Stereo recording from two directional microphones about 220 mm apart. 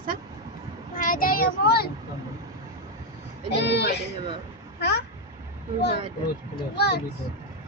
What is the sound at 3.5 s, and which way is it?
Speech, 50° left (ahead or behind).